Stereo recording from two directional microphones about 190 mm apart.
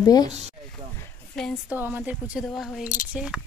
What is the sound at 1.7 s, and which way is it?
Speech, 10° right (ahead or behind).